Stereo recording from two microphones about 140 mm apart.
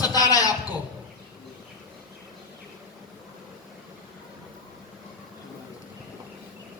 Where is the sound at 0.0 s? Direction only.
25° left (ahead or behind).